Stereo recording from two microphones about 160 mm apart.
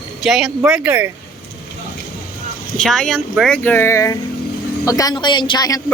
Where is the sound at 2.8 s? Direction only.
5° left (ahead or behind).